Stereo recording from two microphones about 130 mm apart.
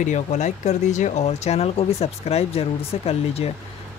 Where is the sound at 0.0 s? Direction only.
70° left (ahead or behind).